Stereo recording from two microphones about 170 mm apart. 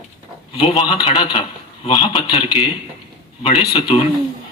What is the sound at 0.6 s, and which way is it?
Speech, 30° left (ahead or behind).